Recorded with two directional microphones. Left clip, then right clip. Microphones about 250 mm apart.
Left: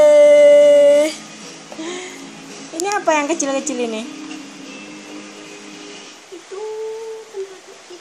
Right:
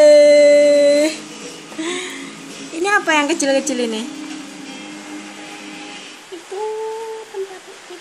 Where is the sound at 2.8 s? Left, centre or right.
Centre.